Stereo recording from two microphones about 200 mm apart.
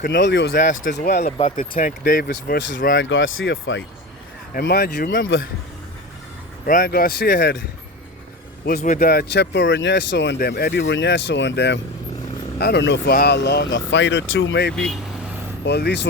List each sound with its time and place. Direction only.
0.1 s speech: 65° left (ahead or behind)
0.5 s speech: 40° left (ahead or behind)
1.2 s speech: 35° left (ahead or behind); by 3.8 s 70° left (ahead or behind)
4.5 s speech: 50° left (ahead or behind)
6.7 s speech: 45° left (ahead or behind)
8.6 s speech: 40° left (ahead or behind); by 14.8 s 60° left (ahead or behind)
14.8 s speech: centre (ahead or behind)
15.6 s speech: 60° left (ahead or behind)